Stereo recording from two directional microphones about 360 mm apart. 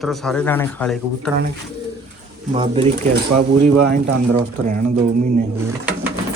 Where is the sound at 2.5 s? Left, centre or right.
Centre.